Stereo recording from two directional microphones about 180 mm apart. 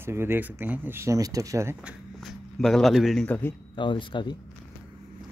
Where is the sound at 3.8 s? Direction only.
25° left (ahead or behind).